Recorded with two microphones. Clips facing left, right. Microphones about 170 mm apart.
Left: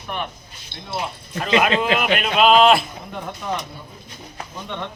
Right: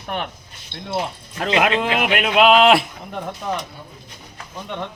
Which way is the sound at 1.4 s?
60° right (ahead or behind).